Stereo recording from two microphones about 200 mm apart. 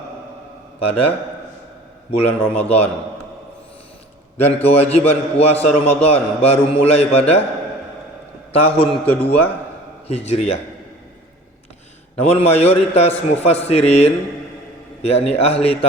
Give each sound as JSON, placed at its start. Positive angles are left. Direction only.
{"t": 0.8, "sound": "a man's voice", "side_deg": 30}
{"t": 4.4, "sound": "a man's voice", "side_deg": 30}
{"t": 8.5, "sound": "a man's voice", "side_deg": 30}
{"t": 12.2, "sound": "a man's voice", "side_deg": 30}